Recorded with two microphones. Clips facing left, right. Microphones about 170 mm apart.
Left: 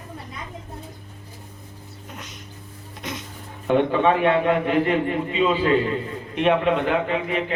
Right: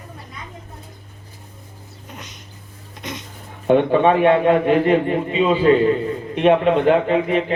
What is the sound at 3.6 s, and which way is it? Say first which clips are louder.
A man's voice: right 4 dB; 25° right (ahead or behind).